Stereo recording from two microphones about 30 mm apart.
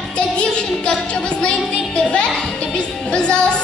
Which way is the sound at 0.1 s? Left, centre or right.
Left.